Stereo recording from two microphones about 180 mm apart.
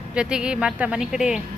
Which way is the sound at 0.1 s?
5° right (ahead or behind).